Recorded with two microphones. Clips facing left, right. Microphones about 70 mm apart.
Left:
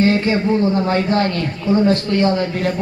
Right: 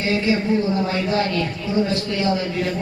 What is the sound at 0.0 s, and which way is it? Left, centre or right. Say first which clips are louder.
Speech: left 5 dB; left.